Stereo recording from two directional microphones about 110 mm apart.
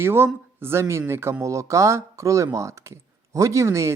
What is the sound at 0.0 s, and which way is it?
Speech, 20° right (ahead or behind).